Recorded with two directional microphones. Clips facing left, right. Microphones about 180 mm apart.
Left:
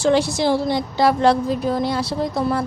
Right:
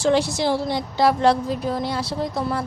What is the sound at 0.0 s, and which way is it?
A woman's voice, 75° left (ahead or behind).